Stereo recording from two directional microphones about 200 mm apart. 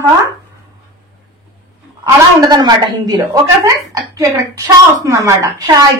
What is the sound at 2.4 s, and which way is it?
A woman's voice, 20° right (ahead or behind).